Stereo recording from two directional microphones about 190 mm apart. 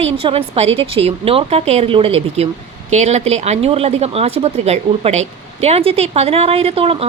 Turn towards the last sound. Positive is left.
turn(degrees=-30)  # may be behind; listen again after turning